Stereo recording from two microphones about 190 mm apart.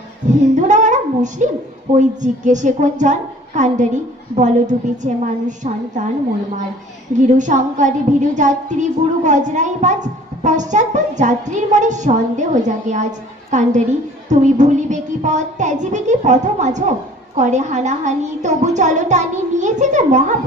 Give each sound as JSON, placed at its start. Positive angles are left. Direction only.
{"t": 0.5, "sound": "a sound", "side_deg": -40}
{"t": 2.0, "sound": "a woman's voice", "side_deg": -40}
{"t": 7.2, "sound": "a woman's voice", "side_deg": -40}